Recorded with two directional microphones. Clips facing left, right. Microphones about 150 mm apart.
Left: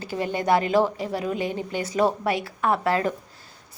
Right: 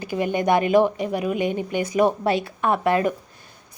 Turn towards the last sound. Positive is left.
turn(degrees=-20)  # may be behind; listen again after turning